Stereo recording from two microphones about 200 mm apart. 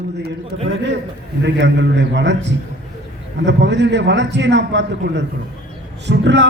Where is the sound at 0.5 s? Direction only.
60° right (ahead or behind).